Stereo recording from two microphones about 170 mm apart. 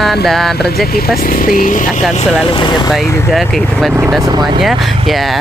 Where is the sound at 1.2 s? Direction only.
55° left (ahead or behind).